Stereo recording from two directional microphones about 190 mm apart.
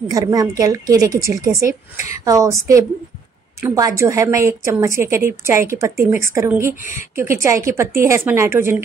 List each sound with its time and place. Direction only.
0.1 s a woman's voice: 20° right (ahead or behind)